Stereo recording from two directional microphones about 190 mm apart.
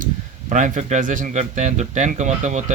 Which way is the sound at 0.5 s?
40° right (ahead or behind).